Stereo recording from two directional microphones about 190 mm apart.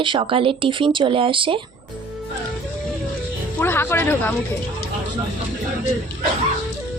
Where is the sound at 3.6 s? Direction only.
10° left (ahead or behind).